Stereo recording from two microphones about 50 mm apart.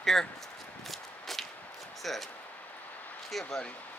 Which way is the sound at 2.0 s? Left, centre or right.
Centre.